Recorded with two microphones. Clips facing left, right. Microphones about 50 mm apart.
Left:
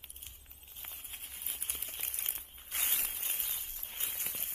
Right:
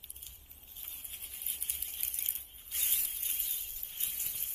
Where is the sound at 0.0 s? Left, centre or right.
Left.